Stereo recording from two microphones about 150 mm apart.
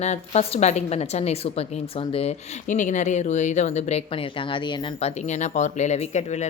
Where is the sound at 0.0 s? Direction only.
45° left (ahead or behind).